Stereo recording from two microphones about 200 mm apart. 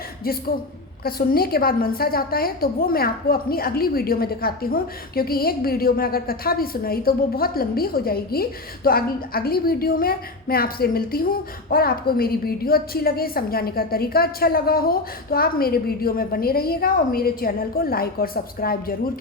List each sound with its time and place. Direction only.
0.3 s a woman's voice: 50° left (ahead or behind)